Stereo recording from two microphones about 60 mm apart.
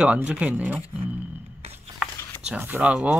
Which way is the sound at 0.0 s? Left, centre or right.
Right.